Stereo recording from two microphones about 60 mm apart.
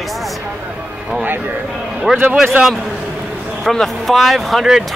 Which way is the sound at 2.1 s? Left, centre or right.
Centre.